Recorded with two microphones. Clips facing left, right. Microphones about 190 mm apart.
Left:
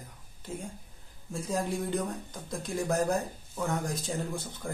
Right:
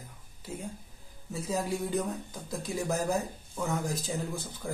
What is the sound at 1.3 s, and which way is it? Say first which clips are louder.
Speech: even; 5° right (ahead or behind).